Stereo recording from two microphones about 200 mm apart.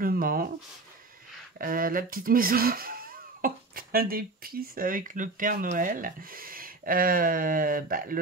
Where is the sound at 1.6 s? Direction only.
45° right (ahead or behind).